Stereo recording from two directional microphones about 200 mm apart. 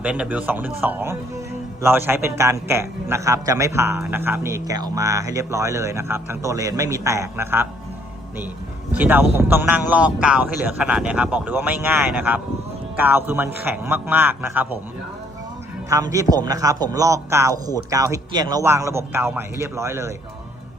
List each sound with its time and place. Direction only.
0.0 s a man's voice: 5° right (ahead or behind)
8.9 s a man's voice: 10° right (ahead or behind)
15.9 s a man's voice: 15° right (ahead or behind)